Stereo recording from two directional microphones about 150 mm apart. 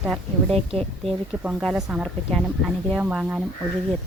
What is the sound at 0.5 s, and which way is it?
Speech, 40° right (ahead or behind).